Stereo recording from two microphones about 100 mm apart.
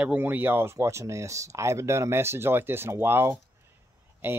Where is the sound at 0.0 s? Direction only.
15° right (ahead or behind).